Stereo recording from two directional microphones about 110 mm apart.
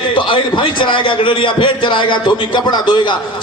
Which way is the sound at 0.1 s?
50° left (ahead or behind).